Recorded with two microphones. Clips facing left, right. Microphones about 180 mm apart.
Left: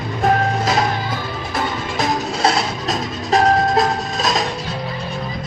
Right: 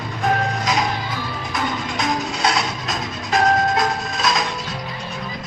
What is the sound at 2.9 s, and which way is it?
Music, 30° left (ahead or behind).